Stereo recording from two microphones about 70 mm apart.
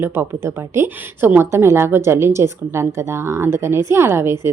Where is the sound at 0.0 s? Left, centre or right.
Right.